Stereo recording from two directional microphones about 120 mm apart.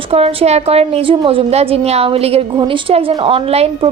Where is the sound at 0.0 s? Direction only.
55° right (ahead or behind).